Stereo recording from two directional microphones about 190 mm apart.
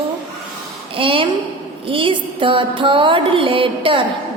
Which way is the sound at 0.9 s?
30° right (ahead or behind).